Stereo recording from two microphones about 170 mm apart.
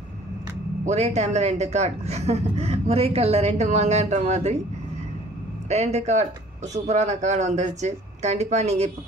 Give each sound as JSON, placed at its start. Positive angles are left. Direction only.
{"t": 0.8, "sound": "speech", "side_deg": -40}
{"t": 5.7, "sound": "speech", "side_deg": -40}